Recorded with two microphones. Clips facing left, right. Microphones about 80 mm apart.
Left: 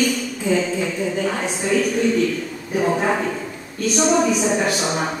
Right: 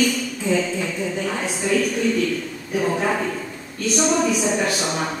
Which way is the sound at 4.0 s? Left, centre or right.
Centre.